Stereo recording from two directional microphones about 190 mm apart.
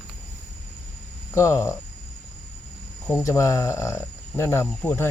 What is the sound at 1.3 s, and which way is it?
Speech, 15° left (ahead or behind).